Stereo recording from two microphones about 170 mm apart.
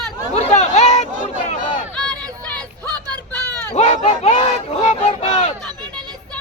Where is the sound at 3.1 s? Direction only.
20° right (ahead or behind).